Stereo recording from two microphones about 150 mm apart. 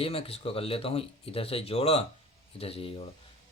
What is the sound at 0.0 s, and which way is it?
Speech, 40° left (ahead or behind).